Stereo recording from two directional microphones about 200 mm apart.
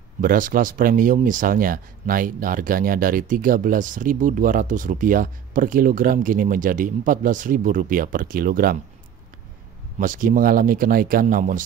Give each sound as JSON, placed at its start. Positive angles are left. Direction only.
{"t": 0.2, "sound": "speech", "side_deg": -45}
{"t": 9.9, "sound": "speech", "side_deg": -40}